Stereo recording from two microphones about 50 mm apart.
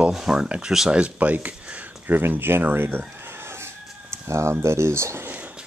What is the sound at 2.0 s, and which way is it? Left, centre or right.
Speech, right.